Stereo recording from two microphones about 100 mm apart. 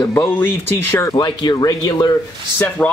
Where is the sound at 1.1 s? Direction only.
45° left (ahead or behind).